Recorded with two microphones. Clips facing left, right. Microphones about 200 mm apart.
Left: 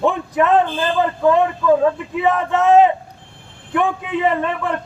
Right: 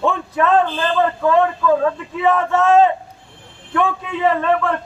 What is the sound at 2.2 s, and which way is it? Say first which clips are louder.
Speech: right 3 dB; 15° left (ahead or behind).